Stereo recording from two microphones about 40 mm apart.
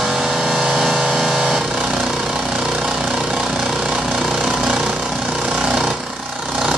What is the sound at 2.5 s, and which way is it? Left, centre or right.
Vehicle, right.